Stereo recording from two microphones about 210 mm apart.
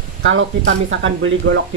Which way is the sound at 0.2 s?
65° right (ahead or behind).